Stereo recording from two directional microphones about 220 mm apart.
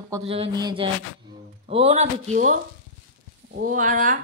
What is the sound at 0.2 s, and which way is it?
Speech, 25° right (ahead or behind).